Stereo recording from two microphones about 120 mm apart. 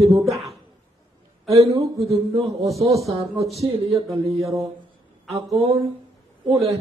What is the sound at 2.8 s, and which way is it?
Speech, 25° right (ahead or behind).